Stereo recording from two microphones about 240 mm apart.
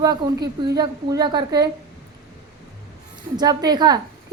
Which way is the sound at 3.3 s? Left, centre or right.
Centre.